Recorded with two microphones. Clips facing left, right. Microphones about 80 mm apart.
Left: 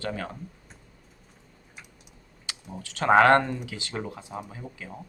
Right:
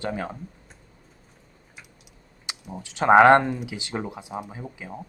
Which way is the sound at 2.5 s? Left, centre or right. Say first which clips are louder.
Right 3 dB; centre.